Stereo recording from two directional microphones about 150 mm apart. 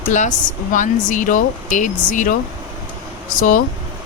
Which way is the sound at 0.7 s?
55° left (ahead or behind).